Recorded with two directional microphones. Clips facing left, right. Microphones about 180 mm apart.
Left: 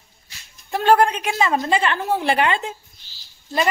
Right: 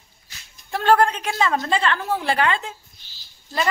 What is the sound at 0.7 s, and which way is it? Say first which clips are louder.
A woman's voice: left 2 dB; 15° left (ahead or behind).